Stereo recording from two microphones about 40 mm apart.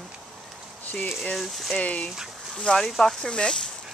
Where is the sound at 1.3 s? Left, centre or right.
Centre.